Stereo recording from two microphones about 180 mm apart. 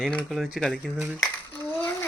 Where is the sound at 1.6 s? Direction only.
10° left (ahead or behind).